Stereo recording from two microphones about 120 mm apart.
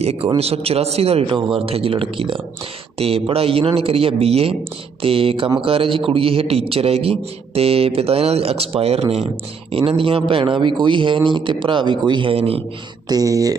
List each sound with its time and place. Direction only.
0.0 s a man's voice: 60° right (ahead or behind)
9.7 s speech: 50° right (ahead or behind)
13.1 s speech: 30° right (ahead or behind)